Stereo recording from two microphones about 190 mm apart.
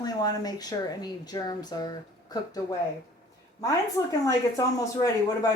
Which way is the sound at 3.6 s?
20° left (ahead or behind).